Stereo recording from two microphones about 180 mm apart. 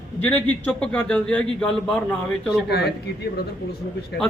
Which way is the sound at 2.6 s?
65° left (ahead or behind).